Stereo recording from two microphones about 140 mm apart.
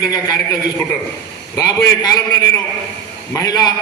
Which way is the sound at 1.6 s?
25° left (ahead or behind).